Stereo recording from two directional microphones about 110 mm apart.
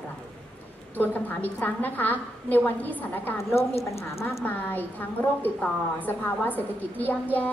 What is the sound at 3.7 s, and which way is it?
Speech, 65° left (ahead or behind).